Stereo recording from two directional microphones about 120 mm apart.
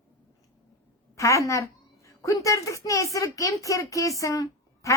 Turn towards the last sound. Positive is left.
turn(degrees=25)  # may be behind; listen again after turning